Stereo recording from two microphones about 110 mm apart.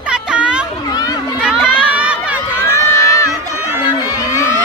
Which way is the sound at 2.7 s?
25° left (ahead or behind).